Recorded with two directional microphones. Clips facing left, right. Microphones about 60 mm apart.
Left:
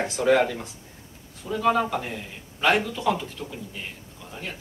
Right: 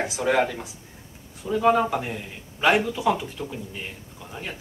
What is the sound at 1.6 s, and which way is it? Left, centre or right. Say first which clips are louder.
Speech: right 2 dB; centre.